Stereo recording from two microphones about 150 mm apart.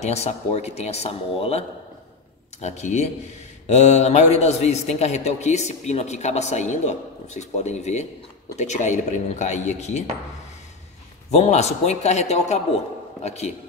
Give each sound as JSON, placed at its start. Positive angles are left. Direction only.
{"t": 0.0, "sound": "a man's voice", "side_deg": 45}
{"t": 2.6, "sound": "a man's voice", "side_deg": 50}
{"t": 11.2, "sound": "a man's voice", "side_deg": 45}